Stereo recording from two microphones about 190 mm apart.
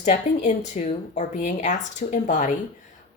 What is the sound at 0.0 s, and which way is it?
Speech, 40° left (ahead or behind).